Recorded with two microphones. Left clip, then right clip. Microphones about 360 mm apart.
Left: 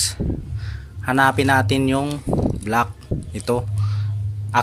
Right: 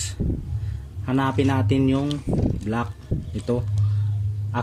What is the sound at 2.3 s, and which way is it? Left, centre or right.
Speech, left.